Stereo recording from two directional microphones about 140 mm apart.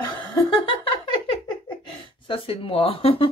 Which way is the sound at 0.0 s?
35° left (ahead or behind).